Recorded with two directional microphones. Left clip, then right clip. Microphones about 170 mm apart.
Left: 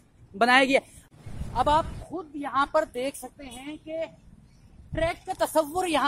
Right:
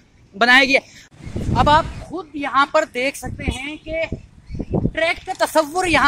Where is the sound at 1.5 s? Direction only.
15° right (ahead or behind).